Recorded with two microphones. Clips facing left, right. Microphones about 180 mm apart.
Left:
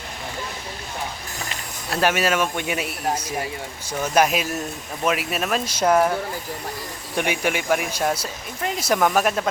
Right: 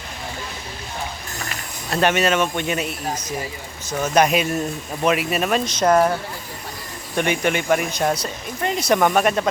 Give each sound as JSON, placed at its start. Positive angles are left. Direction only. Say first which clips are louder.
{"t": 1.9, "sound": "speech", "louder": "right 2 dB", "side_deg": 5}
{"t": 7.2, "sound": "speech", "louder": "right 3 dB", "side_deg": 10}